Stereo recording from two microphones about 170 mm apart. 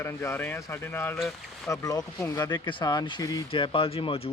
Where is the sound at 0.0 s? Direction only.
15° left (ahead or behind).